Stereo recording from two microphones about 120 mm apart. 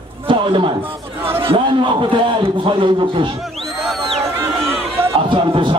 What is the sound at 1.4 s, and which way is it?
Speech, 45° right (ahead or behind).